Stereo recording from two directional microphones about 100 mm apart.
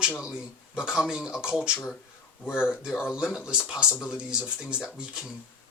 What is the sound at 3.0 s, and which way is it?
Speech, 5° right (ahead or behind).